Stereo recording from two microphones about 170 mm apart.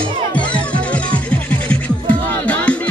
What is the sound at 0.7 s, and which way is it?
Music, 5° left (ahead or behind).